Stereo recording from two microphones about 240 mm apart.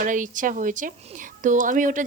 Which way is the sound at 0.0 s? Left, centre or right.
Right.